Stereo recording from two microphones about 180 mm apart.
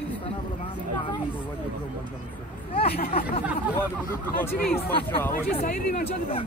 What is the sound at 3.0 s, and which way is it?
Speech, 55° left (ahead or behind).